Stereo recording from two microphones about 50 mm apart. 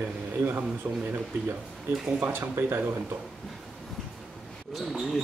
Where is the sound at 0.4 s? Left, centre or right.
Right.